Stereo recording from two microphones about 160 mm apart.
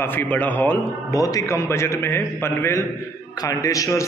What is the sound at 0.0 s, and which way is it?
A man's voice, 15° left (ahead or behind).